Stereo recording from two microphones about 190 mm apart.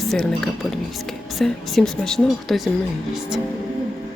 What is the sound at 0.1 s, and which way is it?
A woman's voice, 5° left (ahead or behind).